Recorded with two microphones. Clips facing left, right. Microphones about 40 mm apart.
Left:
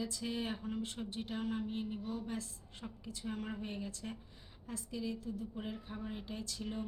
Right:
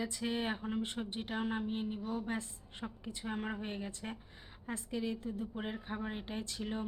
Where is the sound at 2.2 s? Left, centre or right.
Right.